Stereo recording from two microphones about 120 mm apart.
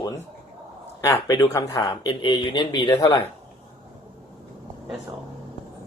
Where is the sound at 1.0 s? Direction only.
25° left (ahead or behind).